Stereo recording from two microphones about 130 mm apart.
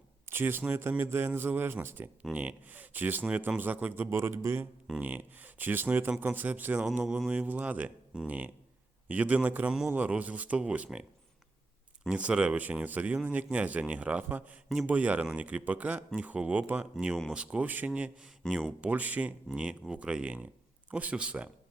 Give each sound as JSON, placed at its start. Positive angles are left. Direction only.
{"t": 0.3, "sound": "speech", "side_deg": -15}
{"t": 12.0, "sound": "speech", "side_deg": -10}
{"t": 18.8, "sound": "speech", "side_deg": -10}